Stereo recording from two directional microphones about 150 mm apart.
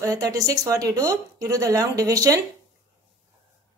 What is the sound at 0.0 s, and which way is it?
A woman's voice, 25° right (ahead or behind).